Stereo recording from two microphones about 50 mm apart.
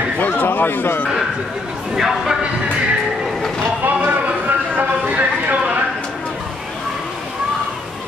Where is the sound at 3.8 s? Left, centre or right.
Right.